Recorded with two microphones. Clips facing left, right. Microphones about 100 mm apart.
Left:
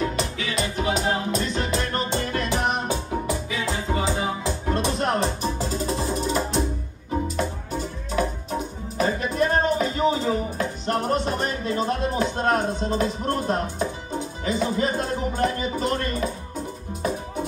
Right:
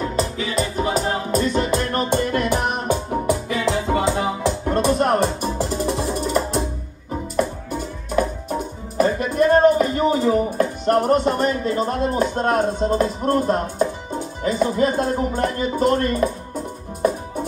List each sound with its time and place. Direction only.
0.0 s music: 35° right (ahead or behind); by 4.5 s 65° right (ahead or behind)
4.6 s music: 50° right (ahead or behind)
5.6 s music: 65° right (ahead or behind)
8.9 s music: 50° right (ahead or behind)
14.4 s speech: 45° right (ahead or behind)